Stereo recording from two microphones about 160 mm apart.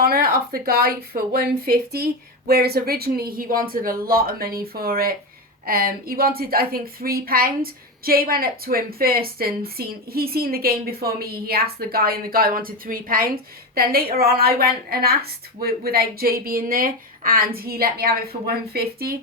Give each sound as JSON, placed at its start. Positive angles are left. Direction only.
{"t": 0.0, "sound": "a woman's voice", "side_deg": -70}